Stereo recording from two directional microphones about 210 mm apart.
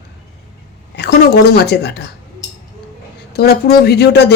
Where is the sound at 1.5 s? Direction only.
50° left (ahead or behind).